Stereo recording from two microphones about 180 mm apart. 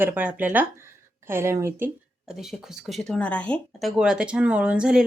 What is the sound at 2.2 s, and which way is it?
Speech, centre (ahead or behind).